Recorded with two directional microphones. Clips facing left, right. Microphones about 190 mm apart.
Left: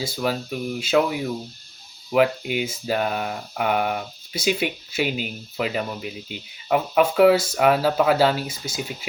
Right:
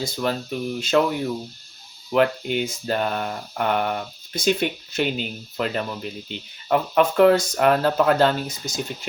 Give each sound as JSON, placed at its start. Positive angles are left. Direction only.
{"t": 0.0, "sound": "speech", "side_deg": 5}